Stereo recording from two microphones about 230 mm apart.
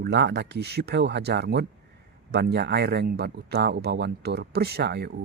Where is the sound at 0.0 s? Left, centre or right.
Right.